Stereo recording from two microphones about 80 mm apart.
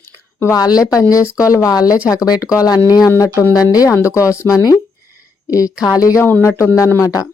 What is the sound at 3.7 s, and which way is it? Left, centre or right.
Speech, left.